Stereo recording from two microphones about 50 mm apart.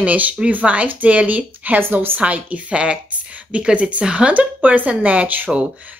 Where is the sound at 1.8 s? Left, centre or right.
Right.